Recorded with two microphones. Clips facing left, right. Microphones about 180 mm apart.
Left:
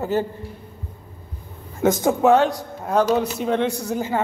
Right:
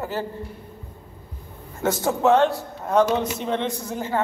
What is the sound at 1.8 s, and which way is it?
A man's voice, 15° left (ahead or behind).